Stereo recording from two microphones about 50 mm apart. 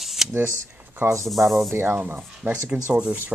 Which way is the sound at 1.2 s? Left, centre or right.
Centre.